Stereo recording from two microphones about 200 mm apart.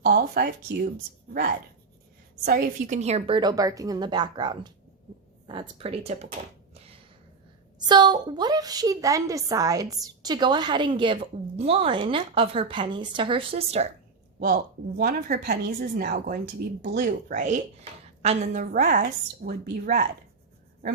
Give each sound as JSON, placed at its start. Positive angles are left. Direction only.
{"t": 0.0, "sound": "a woman's voice", "side_deg": -50}
{"t": 6.7, "sound": "a sound", "side_deg": -30}
{"t": 7.9, "sound": "a woman's voice", "side_deg": -20}
{"t": 14.3, "sound": "a woman's voice", "side_deg": -45}